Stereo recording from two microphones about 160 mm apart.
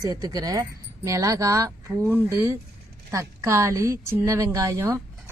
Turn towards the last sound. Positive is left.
turn(degrees=-20)  # may be behind; listen again after turning